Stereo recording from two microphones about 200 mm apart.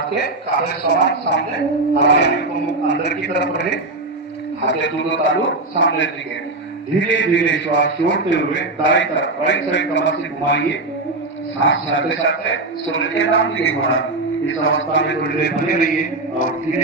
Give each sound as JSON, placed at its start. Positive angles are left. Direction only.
{"t": 0.7, "sound": "a man's voice", "side_deg": 55}
{"t": 14.5, "sound": "speech", "side_deg": 75}